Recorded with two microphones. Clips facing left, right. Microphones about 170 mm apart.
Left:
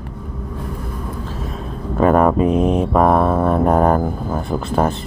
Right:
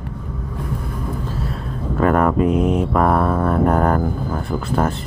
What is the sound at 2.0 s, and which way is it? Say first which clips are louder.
Speech: left 2 dB; 20° left (ahead or behind).